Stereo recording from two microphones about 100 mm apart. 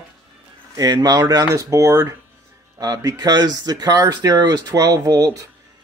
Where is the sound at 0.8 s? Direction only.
40° right (ahead or behind).